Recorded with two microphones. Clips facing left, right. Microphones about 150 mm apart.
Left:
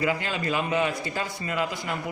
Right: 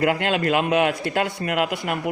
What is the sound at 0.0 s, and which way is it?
Speech, 65° right (ahead or behind).